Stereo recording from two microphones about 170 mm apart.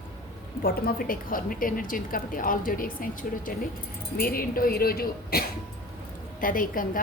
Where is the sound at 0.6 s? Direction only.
60° left (ahead or behind).